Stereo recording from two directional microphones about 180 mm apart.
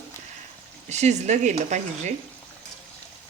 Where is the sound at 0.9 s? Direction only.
40° right (ahead or behind).